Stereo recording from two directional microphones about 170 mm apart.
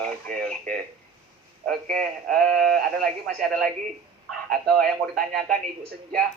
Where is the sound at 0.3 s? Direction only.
5° left (ahead or behind).